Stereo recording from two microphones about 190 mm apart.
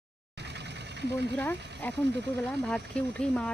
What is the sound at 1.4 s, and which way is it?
Speech, 10° left (ahead or behind).